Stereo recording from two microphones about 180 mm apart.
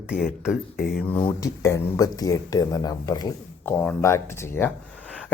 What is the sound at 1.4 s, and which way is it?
Speech, 15° left (ahead or behind).